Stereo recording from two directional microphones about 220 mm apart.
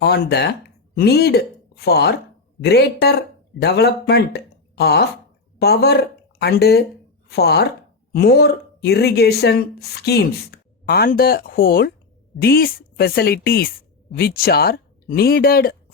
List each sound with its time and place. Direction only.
0.0 s a woman's voice: 50° left (ahead or behind)